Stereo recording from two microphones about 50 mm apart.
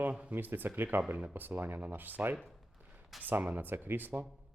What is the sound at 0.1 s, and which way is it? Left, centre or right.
Speech, right.